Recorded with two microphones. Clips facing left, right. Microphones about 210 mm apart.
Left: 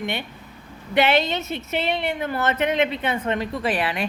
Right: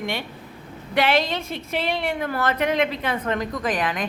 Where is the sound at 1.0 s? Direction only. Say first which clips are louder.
Left 1 dB; 25° left (ahead or behind).